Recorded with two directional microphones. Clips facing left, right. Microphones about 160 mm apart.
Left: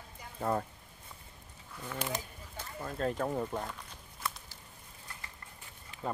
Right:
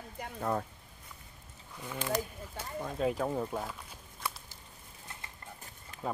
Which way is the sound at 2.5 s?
10° right (ahead or behind).